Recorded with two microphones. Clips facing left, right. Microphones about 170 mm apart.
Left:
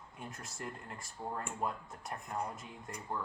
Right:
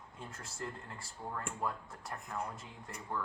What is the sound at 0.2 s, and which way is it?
Speech, 20° left (ahead or behind).